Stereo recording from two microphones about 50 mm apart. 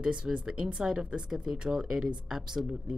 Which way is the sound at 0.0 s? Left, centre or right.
Centre.